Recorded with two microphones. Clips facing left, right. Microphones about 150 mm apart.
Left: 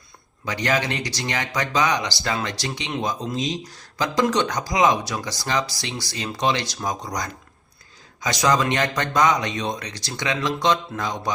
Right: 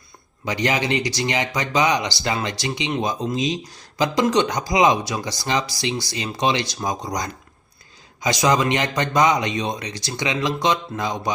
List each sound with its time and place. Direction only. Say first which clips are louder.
0.4 s speech: right 1 dB; 15° right (ahead or behind)